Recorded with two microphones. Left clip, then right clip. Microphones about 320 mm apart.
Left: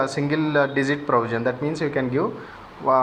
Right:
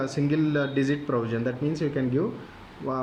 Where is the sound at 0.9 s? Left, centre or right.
Left.